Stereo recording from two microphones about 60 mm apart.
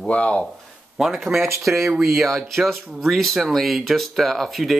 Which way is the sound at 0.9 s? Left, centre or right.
Centre.